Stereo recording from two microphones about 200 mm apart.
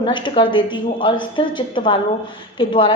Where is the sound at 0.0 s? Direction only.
25° left (ahead or behind).